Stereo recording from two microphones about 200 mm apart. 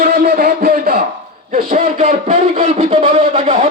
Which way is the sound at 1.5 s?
35° right (ahead or behind).